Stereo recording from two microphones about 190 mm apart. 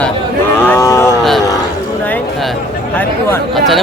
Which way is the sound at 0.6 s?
15° left (ahead or behind).